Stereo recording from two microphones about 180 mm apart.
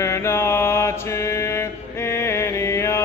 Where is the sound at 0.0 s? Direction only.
15° left (ahead or behind).